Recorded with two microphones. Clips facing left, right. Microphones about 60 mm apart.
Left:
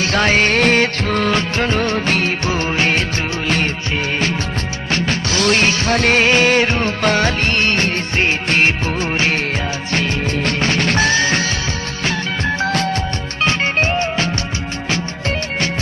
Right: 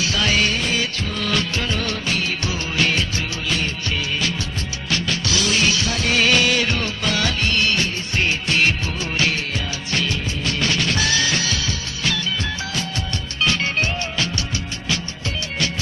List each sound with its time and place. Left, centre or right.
0.0 s music: left
0.5 s music: left
1.3 s music: left
5.4 s music: left
6.2 s music: left
7.0 s music of bollywood: left
8.1 s music: left
13.4 s music: left